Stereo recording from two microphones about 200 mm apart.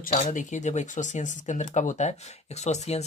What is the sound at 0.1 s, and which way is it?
Speech, 40° left (ahead or behind).